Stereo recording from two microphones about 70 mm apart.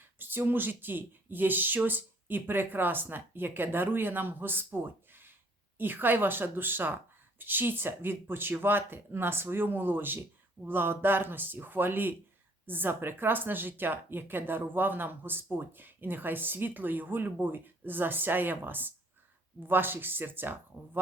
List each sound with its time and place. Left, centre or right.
0.2 s speech: right